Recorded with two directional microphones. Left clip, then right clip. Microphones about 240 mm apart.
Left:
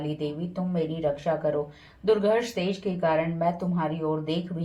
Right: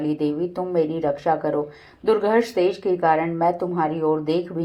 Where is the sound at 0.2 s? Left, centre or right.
Right.